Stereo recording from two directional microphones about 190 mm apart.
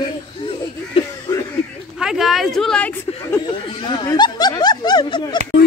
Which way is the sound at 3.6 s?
25° left (ahead or behind).